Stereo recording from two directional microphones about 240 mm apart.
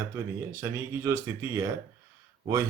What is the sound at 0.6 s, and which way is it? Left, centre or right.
Speech, centre.